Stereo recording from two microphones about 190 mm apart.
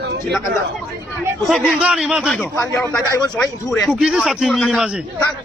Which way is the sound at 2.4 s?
15° left (ahead or behind).